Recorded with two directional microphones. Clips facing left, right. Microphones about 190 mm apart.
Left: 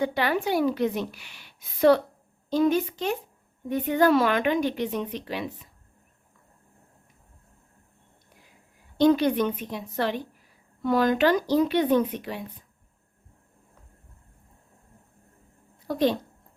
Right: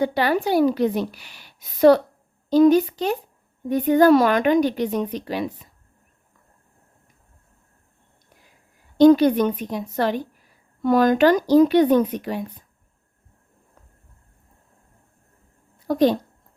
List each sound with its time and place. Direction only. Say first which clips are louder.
0.0 s a woman's voice: right 4 dB; 35° right (ahead or behind)
9.0 s a woman's voice: right 7 dB; 40° right (ahead or behind)
15.9 s a woman's voice: right 6 dB; 40° right (ahead or behind)